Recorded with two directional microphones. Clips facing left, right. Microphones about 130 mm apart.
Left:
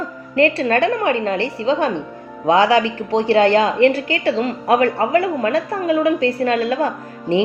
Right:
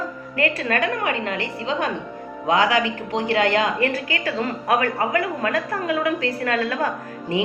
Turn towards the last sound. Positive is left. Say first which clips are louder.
# left 6 dB
turn(degrees=30)  # may be behind; listen again after turning